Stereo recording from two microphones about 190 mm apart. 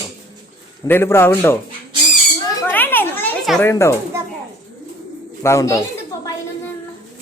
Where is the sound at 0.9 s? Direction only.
10° left (ahead or behind).